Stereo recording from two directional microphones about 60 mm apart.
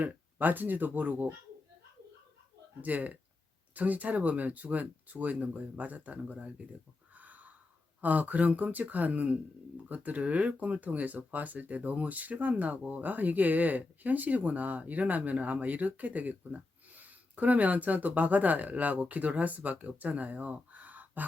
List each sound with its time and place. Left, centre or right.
0.0 s speech: right
2.8 s speech: right
7.2 s wheeze: right
8.0 s speech: right